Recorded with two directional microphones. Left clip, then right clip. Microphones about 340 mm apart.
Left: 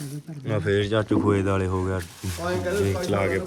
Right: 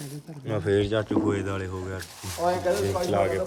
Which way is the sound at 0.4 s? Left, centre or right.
Centre.